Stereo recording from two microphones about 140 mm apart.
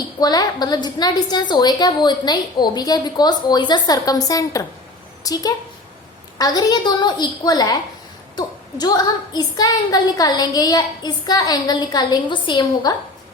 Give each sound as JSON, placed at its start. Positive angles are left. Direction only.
{"t": 0.2, "sound": "a woman's voice", "side_deg": 30}